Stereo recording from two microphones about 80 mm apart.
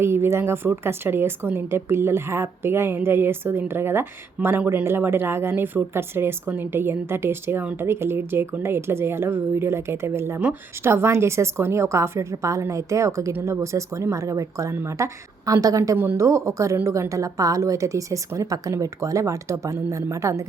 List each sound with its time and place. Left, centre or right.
0.0 s a woman's voice: right